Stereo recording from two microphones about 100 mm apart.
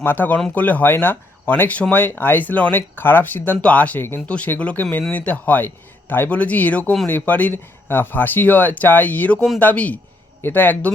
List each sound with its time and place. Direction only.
0.0 s speech: 20° left (ahead or behind)